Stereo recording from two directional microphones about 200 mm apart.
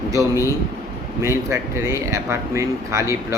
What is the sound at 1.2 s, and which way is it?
A man's voice, 15° right (ahead or behind).